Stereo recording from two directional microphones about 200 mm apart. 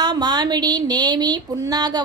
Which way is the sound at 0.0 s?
20° right (ahead or behind).